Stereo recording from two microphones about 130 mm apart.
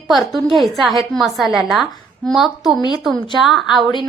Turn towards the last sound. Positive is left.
turn(degrees=0)  # may be behind; listen again after turning